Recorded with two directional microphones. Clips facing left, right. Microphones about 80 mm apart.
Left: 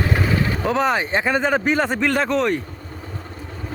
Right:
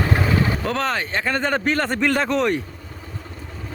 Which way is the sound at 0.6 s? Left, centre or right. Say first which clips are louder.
Left 4 dB; centre.